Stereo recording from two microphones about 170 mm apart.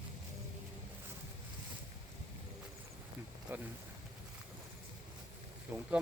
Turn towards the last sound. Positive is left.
turn(degrees=-20)  # may be behind; listen again after turning